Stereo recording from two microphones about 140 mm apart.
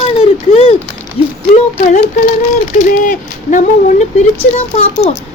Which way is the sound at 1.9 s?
60° left (ahead or behind).